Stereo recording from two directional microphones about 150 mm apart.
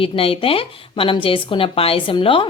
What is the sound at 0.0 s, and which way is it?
Speech, 40° left (ahead or behind).